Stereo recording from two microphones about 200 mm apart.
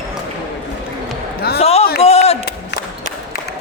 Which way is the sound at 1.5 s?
30° left (ahead or behind).